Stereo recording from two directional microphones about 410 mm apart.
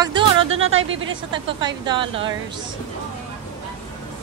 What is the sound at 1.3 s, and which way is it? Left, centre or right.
Speech, centre.